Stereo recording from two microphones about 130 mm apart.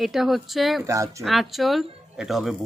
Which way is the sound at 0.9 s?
25° right (ahead or behind).